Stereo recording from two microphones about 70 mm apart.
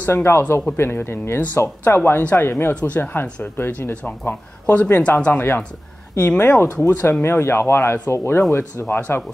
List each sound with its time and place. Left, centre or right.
0.0 s speech: left
5.3 s speech: left
6.8 s speech: left